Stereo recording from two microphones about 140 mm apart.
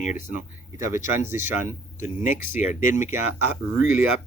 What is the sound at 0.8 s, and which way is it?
Speech, 20° right (ahead or behind).